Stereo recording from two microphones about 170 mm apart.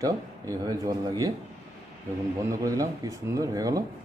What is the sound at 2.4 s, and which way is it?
A man's voice, 20° right (ahead or behind).